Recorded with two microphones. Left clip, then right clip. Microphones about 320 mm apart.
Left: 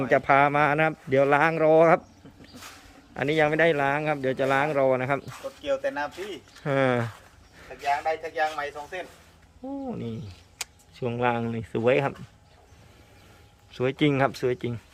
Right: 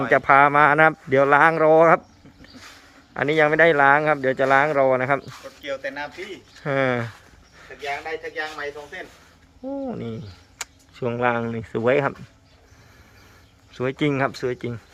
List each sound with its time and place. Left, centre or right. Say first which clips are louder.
0.1 s speech: right 5 dB; centre
3.2 s speech: right 5 dB; centre
5.2 s speech: left 1 dB; left
6.6 s speech: right 2 dB; centre
9.8 s speech: right 4 dB; centre
13.7 s speech: right 1 dB; centre